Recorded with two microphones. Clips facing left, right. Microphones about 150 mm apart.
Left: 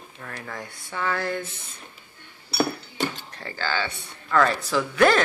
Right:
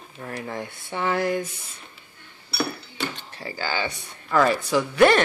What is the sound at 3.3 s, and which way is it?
Speech, 10° right (ahead or behind).